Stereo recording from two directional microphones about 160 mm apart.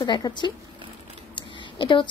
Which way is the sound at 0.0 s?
30° left (ahead or behind).